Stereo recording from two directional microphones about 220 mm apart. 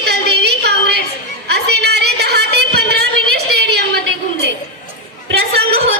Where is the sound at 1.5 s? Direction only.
50° right (ahead or behind).